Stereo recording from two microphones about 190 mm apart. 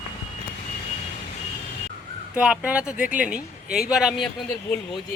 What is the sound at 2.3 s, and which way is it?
Speech, 5° right (ahead or behind).